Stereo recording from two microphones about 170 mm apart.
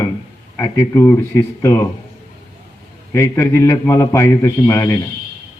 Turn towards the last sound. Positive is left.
turn(degrees=15)  # may be behind; listen again after turning